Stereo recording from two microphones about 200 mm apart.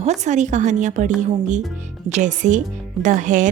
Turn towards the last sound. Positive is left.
turn(degrees=-40)  # may be behind; listen again after turning